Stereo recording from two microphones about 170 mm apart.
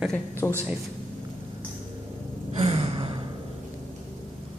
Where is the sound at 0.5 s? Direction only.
10° right (ahead or behind).